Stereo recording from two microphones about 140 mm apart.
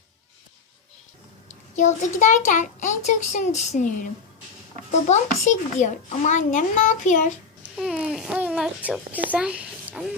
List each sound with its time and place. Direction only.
1.7 s a child's voice: 60° left (ahead or behind)
5.0 s a child's voice: 60° left (ahead or behind)
7.6 s babbling: 5° right (ahead or behind)
9.1 s speech: 10° right (ahead or behind)